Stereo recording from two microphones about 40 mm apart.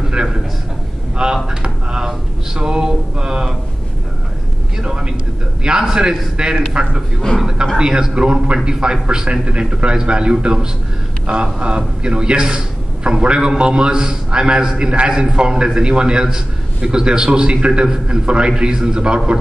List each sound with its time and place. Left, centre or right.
0.1 s a man's voice: right
4.8 s a man's voice: right